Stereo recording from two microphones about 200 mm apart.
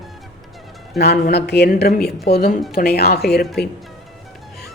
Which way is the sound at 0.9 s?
50° left (ahead or behind).